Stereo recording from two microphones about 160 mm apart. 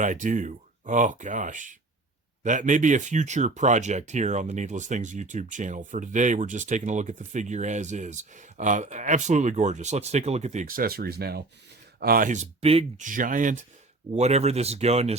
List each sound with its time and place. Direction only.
0.0 s speech: 50° right (ahead or behind); by 11.4 s 80° right
11.9 s speech: 65° right (ahead or behind); by 13.1 s 40° right (ahead or behind)
13.1 s speech: 55° right (ahead or behind)
14.1 s speech: 45° right (ahead or behind)